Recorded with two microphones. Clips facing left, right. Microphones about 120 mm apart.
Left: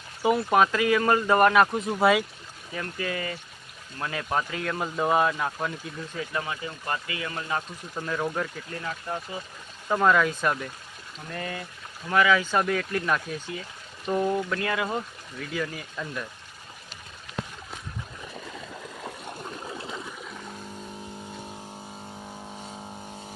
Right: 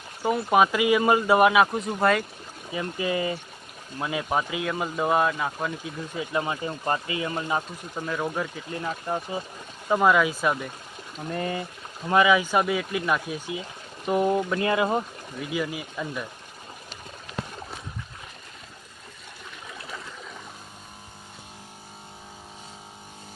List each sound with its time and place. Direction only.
0.2 s speech: centre (ahead or behind)
2.7 s speech: 15° right (ahead or behind)
6.1 s speech: 25° right (ahead or behind)
7.9 s speech: 5° right (ahead or behind)
8.7 s speech: 25° right (ahead or behind)
9.9 s speech: 10° right (ahead or behind)
11.3 s speech: 25° right (ahead or behind)
15.4 s speech: 15° right (ahead or behind)
19.6 s a sound: 25° left (ahead or behind)